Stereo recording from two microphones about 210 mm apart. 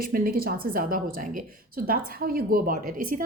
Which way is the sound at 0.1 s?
45° right (ahead or behind).